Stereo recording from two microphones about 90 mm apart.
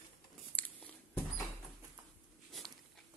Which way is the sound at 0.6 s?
20° left (ahead or behind).